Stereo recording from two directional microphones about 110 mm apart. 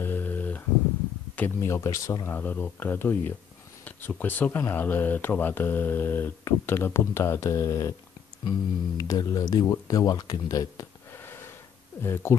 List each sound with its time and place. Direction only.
0.0 s a sound: 20° left (ahead or behind)
1.3 s speech: 20° left (ahead or behind); by 10.9 s 35° left (ahead or behind)
12.0 s speech: 20° left (ahead or behind)